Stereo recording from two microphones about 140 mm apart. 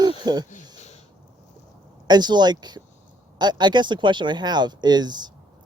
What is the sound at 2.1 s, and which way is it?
Speech, 30° right (ahead or behind).